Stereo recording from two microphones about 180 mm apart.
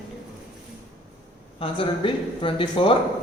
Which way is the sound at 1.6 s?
30° left (ahead or behind).